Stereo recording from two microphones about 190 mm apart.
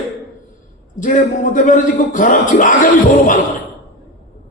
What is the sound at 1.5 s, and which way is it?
A man's voice, 45° left (ahead or behind).